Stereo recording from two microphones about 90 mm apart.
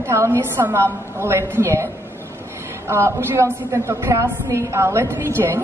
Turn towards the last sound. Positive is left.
turn(degrees=-30)  # may be behind; listen again after turning